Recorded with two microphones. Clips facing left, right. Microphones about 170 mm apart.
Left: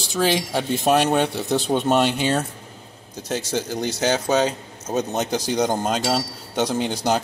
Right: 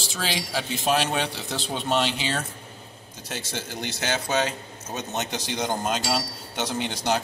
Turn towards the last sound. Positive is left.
turn(degrees=45)  # may be behind; listen again after turning